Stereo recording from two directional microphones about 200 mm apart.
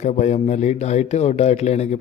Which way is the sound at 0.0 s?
35° left (ahead or behind).